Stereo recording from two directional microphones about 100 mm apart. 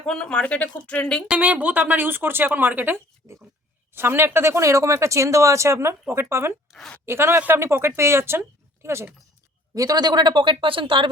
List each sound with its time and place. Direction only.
0.0 s speech: 10° left (ahead or behind)
1.3 s speech: 15° right (ahead or behind)
6.7 s a woman's voice: centre (ahead or behind)
7.0 s speech: 25° right (ahead or behind)
9.7 s speech: 40° right (ahead or behind); by 11.1 s 55° right (ahead or behind)